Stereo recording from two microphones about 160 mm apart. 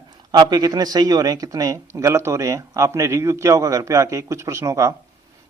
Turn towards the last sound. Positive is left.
turn(degrees=-20)  # may be behind; listen again after turning